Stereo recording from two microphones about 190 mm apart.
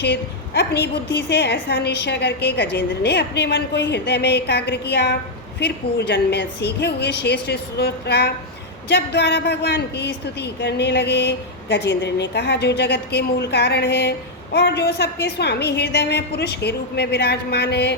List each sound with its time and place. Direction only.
0.0 s a woman's voice: 65° left (ahead or behind)